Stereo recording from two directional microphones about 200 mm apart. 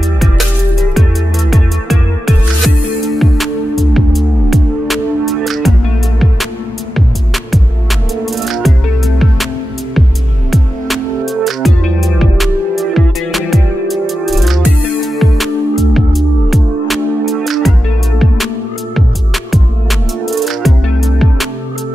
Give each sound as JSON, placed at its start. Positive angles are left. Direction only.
{"t": 1.5, "sound": "music", "side_deg": 0}
{"t": 8.3, "sound": "music", "side_deg": 0}
{"t": 10.5, "sound": "music", "side_deg": 0}
{"t": 18.9, "sound": "music", "side_deg": 0}